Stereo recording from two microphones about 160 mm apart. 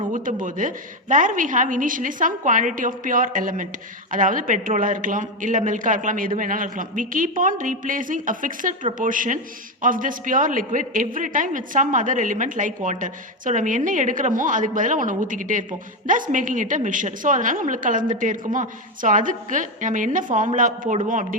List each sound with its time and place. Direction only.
0.1 s a woman's voice: 55° right (ahead or behind)